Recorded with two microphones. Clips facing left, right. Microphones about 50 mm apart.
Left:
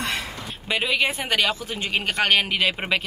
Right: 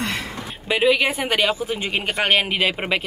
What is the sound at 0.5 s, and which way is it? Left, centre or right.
A woman's voice, centre.